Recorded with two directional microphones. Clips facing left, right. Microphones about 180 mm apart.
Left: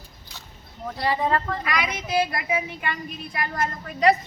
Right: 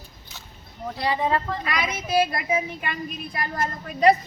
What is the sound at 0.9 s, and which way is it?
Speech, 15° right (ahead or behind).